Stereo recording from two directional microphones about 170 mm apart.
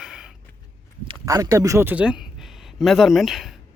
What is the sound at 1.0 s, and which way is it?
Speech, 20° right (ahead or behind).